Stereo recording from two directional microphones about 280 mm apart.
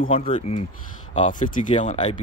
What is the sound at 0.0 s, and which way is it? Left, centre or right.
Speech, centre.